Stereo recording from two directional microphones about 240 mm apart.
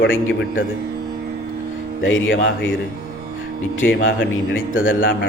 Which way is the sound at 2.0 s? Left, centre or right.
Left.